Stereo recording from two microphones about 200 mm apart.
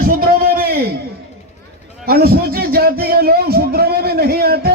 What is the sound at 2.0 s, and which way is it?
A man's voice, 50° right (ahead or behind).